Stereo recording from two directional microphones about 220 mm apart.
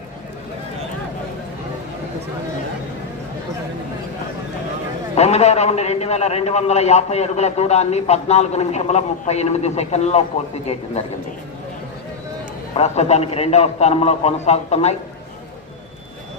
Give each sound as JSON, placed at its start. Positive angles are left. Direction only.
{"t": 5.1, "sound": "a man's voice", "side_deg": 30}
{"t": 12.7, "sound": "a man's voice", "side_deg": 30}